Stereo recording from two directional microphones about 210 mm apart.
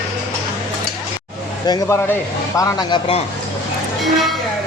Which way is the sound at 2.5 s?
15° left (ahead or behind).